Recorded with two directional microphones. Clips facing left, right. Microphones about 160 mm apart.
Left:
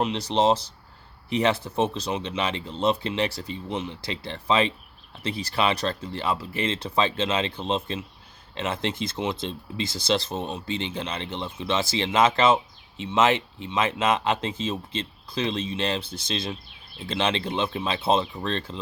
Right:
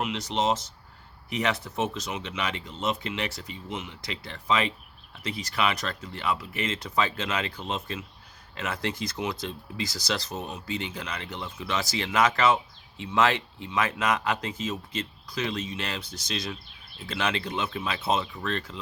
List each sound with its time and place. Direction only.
0.0 s speech: 30° left (ahead or behind)